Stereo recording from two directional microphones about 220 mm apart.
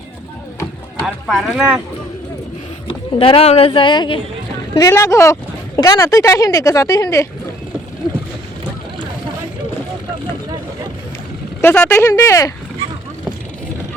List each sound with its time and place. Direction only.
0.9 s speech: centre (ahead or behind)
2.8 s speech: 25° left (ahead or behind)
11.6 s speech: 10° left (ahead or behind)